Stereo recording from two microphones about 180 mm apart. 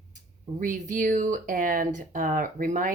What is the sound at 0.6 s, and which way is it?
Speech, 45° right (ahead or behind).